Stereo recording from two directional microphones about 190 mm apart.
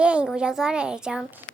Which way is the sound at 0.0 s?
5° right (ahead or behind).